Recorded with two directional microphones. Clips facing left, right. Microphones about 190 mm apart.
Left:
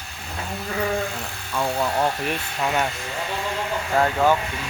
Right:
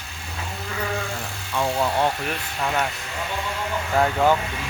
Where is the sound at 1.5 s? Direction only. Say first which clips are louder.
Right 1 dB; centre (ahead or behind).